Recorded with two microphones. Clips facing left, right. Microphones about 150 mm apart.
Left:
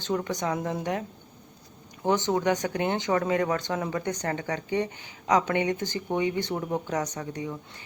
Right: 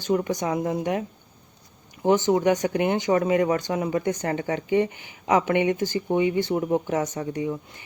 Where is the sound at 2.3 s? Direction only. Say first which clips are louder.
Right 5 dB; 15° right (ahead or behind).